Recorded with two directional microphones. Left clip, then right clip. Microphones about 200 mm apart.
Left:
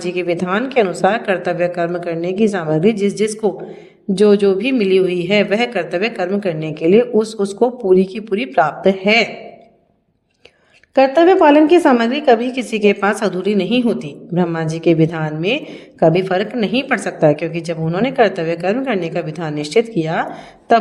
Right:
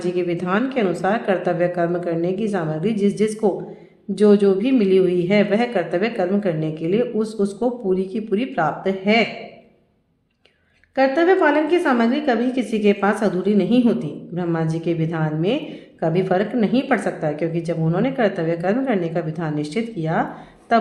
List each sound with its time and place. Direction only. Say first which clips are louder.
0.0 s a woman's voice: left 3 dB; 40° left (ahead or behind)
10.9 s a woman's voice: left 6 dB; 45° left (ahead or behind)